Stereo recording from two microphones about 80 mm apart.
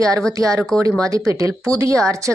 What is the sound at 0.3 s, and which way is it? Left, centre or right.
A woman's voice, right.